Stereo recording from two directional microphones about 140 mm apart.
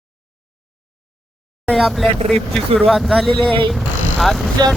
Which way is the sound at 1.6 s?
Centre (ahead or behind).